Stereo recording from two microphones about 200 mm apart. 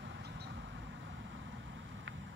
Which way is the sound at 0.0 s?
65° right (ahead or behind).